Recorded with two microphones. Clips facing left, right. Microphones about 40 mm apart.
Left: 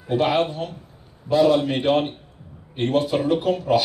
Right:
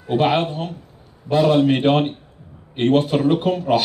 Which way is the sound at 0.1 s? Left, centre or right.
Right.